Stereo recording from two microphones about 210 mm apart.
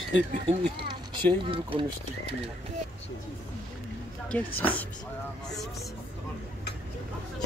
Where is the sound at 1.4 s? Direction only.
25° right (ahead or behind).